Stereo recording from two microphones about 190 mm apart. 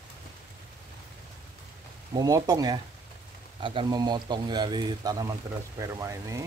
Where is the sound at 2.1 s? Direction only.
20° right (ahead or behind).